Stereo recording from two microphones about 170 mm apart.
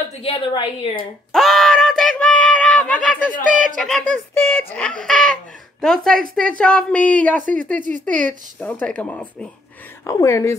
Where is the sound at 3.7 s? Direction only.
5° left (ahead or behind).